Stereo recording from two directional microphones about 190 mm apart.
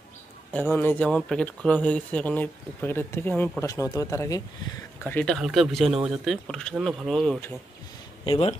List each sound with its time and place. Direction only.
0.5 s speech: 5° left (ahead or behind)
5.0 s speech: 5° left (ahead or behind)
8.3 s speech: 30° left (ahead or behind)